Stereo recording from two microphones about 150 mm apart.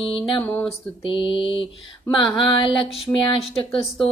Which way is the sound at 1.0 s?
35° left (ahead or behind).